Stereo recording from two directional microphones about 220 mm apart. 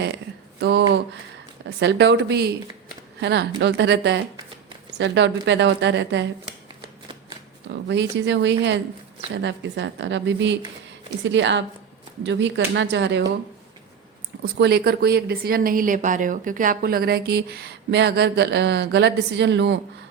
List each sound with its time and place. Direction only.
0.6 s speech: 50° right (ahead or behind)
7.7 s a woman's voice: 50° right (ahead or behind)
14.6 s speech: 50° right (ahead or behind)